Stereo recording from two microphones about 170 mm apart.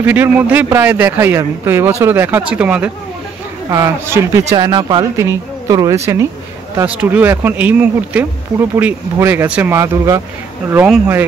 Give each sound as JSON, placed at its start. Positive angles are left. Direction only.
{"t": 0.0, "sound": "speech", "side_deg": -10}